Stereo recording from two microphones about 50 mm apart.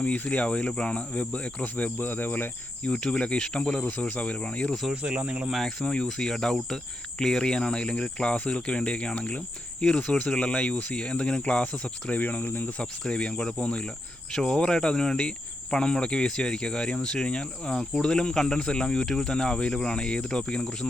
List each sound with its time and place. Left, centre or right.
0.0 s speech: left
2.8 s speech: centre; by 12.7 s left
12.8 s speech: centre